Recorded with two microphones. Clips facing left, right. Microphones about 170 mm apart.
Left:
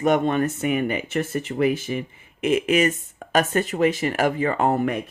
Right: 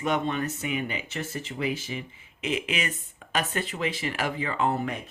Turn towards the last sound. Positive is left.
turn(degrees=50)  # may be behind; listen again after turning